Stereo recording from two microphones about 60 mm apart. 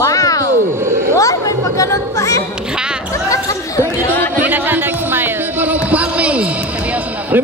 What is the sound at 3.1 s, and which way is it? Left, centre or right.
Speech, left.